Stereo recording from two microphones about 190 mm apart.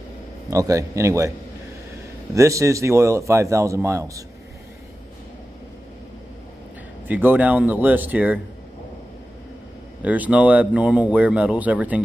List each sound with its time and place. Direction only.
0.5 s speech: 15° right (ahead or behind)
2.3 s speech: 15° right (ahead or behind)
7.1 s speech: 10° right (ahead or behind)
10.0 s speech: 10° right (ahead or behind)